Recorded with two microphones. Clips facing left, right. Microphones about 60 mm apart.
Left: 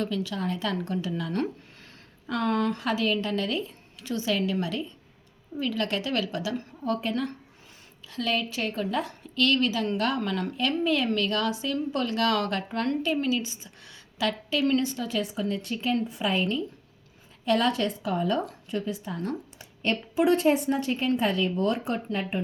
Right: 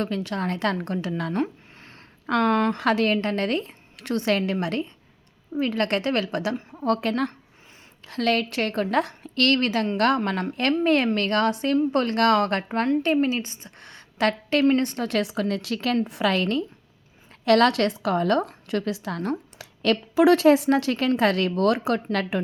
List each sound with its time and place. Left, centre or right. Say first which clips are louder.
0.0 s a woman's voice: right 3 dB; right
6.7 s a woman's voice: right 6 dB; right
18.7 s a woman's voice: right 5 dB; right
21.2 s a woman's voice: right 4 dB; right